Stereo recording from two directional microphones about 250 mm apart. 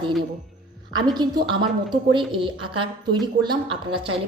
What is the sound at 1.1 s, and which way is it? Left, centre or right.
A woman's voice, centre.